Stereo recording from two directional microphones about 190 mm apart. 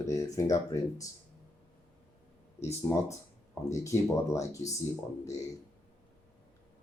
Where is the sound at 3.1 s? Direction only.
15° left (ahead or behind).